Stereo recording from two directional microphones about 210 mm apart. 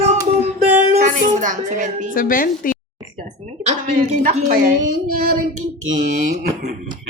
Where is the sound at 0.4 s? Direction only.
35° right (ahead or behind).